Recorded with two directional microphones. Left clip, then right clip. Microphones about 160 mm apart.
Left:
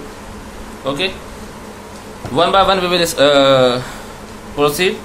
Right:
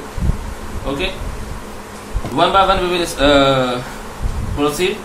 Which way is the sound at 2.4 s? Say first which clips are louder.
Left 1 dB; 85° left.